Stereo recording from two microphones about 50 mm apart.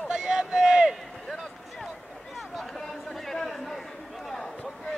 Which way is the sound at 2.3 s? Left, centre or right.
Centre.